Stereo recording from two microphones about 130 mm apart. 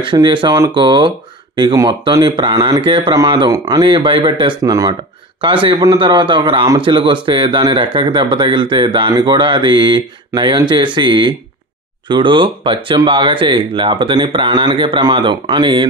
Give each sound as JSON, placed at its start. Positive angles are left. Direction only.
{"t": 0.0, "sound": "speech", "side_deg": -40}